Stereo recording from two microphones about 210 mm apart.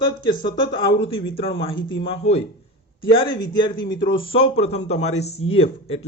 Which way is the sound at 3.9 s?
20° left (ahead or behind).